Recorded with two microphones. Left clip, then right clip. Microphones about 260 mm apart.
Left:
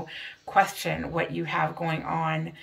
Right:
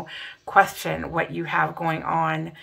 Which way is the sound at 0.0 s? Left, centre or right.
Centre.